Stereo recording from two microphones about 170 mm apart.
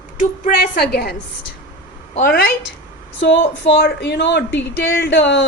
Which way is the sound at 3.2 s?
90° left.